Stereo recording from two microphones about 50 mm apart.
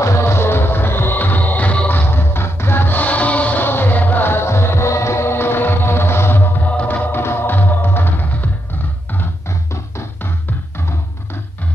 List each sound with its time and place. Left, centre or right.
0.0 s music: left
3.6 s music: left